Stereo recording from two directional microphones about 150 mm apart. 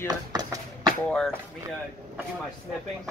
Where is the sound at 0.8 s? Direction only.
5° left (ahead or behind).